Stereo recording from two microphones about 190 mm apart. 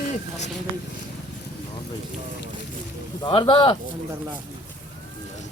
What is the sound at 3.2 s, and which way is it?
Speech, 25° left (ahead or behind).